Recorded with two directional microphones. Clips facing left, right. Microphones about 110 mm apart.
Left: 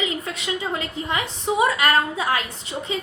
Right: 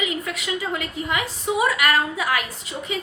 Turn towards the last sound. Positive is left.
turn(degrees=30)  # may be behind; listen again after turning